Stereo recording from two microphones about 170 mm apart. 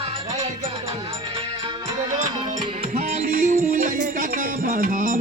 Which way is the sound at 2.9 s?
45° right (ahead or behind).